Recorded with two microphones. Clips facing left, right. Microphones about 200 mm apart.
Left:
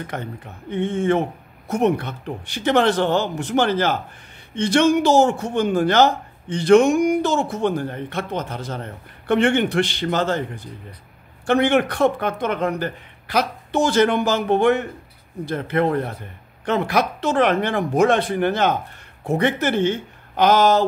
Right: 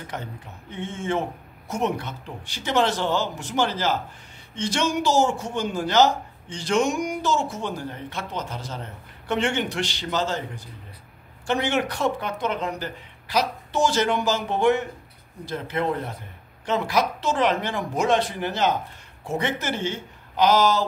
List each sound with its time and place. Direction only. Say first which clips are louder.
0.1 s speech: left 4 dB; 60° left (ahead or behind)